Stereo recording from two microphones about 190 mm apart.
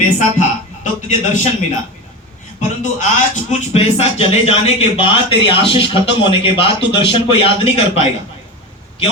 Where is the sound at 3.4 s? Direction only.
35° left (ahead or behind).